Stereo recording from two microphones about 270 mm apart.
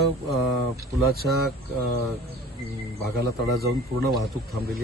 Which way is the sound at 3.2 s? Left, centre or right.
Right.